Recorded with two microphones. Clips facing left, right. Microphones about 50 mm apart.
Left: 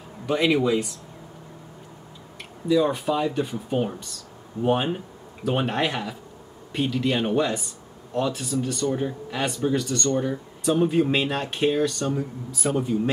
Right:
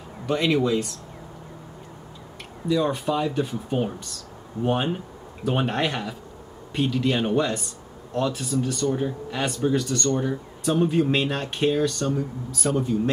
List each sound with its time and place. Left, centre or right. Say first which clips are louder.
0.3 s speech: left 1 dB; centre
2.7 s speech: left 2 dB; centre